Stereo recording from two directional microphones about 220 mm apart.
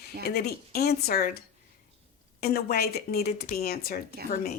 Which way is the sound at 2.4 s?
45° left (ahead or behind).